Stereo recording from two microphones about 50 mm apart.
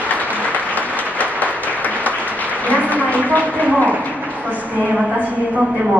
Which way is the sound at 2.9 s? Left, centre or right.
Left.